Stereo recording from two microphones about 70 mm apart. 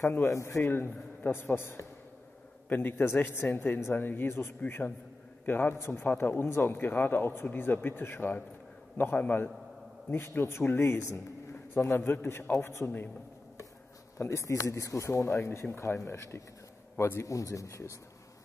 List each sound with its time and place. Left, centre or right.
0.3 s speech: left
0.7 s a man's voice: left
14.1 s speech: left
15.2 s a man's voice: left